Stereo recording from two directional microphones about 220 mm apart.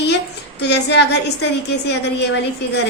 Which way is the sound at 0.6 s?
50° left (ahead or behind).